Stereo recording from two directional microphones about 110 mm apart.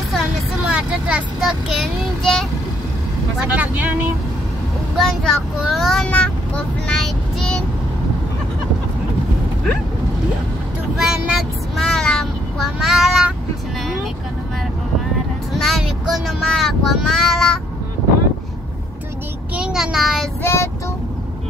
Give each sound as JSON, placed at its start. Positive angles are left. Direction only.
{"t": 0.7, "sound": "a child's voice", "side_deg": -10}
{"t": 3.5, "sound": "speech", "side_deg": -15}
{"t": 4.9, "sound": "a child's voice", "side_deg": 0}
{"t": 11.0, "sound": "child singing", "side_deg": -5}
{"t": 15.6, "sound": "speech", "side_deg": 0}
{"t": 19.5, "sound": "a child's voice", "side_deg": -5}
{"t": 20.4, "sound": "child singing", "side_deg": 25}